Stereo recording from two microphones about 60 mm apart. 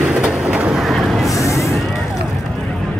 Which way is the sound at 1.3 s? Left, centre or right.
Left.